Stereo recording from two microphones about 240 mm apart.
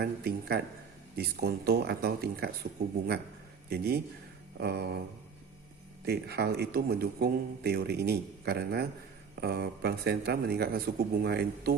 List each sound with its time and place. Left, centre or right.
0.0 s speech: right
4.6 s a sound: right
6.1 s speech: right